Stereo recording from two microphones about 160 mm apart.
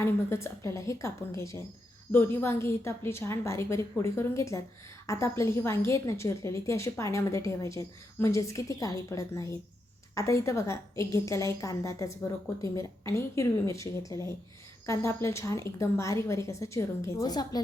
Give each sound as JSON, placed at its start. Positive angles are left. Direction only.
{"t": 0.0, "sound": "a woman's voice", "side_deg": 15}